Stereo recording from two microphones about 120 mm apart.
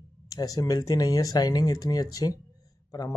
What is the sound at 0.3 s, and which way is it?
Speech, 30° left (ahead or behind).